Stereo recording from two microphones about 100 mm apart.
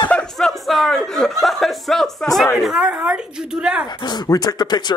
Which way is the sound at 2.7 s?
10° right (ahead or behind).